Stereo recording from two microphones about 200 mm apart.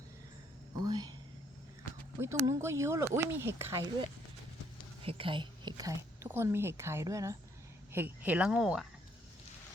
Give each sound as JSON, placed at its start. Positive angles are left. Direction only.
{"t": 0.8, "sound": "speech", "side_deg": -20}
{"t": 2.1, "sound": "speech", "side_deg": -15}
{"t": 5.0, "sound": "speech", "side_deg": -25}